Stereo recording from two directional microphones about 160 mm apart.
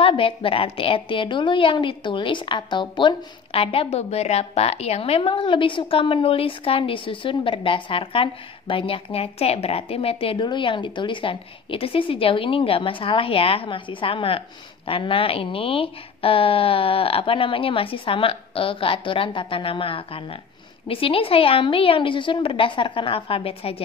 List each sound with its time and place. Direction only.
0.0 s a woman's voice: 35° left (ahead or behind)